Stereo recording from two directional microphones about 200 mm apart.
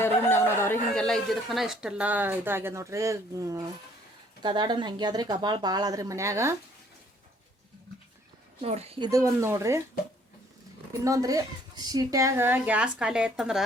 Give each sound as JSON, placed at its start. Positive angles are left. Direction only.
{"t": 0.0, "sound": "speech", "side_deg": 10}
{"t": 8.6, "sound": "speech", "side_deg": -30}
{"t": 9.0, "sound": "a woman's voice", "side_deg": -15}
{"t": 11.0, "sound": "a woman's voice", "side_deg": -15}